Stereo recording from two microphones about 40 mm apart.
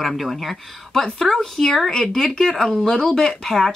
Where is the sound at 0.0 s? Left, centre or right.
Centre.